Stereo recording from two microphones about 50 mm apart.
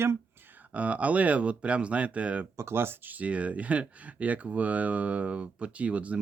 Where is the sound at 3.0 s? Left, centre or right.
Right.